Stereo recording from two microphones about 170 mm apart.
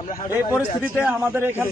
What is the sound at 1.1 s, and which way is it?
Speech, 15° right (ahead or behind).